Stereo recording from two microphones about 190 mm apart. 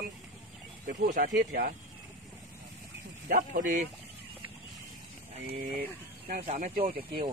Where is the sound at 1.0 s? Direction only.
45° right (ahead or behind).